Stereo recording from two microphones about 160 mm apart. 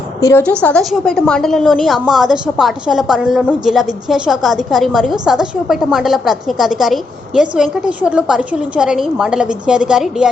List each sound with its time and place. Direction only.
0.2 s a woman's voice: 20° left (ahead or behind)
0.6 s a woman's voice: 5° left (ahead or behind)